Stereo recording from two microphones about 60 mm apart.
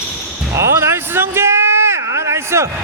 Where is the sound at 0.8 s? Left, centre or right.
Right.